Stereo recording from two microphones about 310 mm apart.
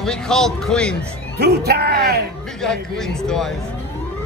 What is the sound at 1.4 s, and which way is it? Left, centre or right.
Speech, right.